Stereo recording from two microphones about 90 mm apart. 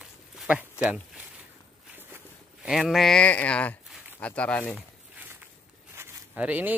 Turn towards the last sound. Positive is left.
turn(degrees=-20)  # may be behind; listen again after turning